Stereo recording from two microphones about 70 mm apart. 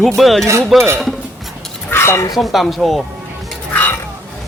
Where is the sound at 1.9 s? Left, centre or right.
Left.